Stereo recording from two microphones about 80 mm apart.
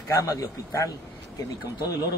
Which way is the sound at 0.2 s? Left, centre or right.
Left.